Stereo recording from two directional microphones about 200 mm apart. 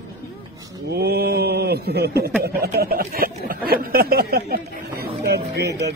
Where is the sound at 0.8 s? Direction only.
55° right (ahead or behind).